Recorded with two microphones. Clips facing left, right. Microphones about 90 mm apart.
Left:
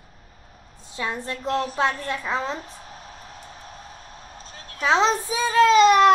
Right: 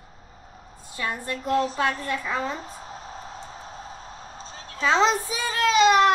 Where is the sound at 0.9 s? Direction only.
20° left (ahead or behind).